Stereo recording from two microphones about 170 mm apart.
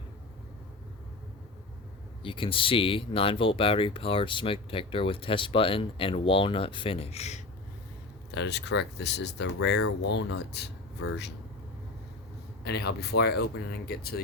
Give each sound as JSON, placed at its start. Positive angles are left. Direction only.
{"t": 2.2, "sound": "speech", "side_deg": 30}
{"t": 8.3, "sound": "speech", "side_deg": 90}
{"t": 12.6, "sound": "speech", "side_deg": 75}